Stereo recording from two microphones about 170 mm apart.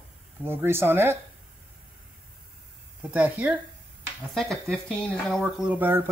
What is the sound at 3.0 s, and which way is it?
Speech, 10° right (ahead or behind).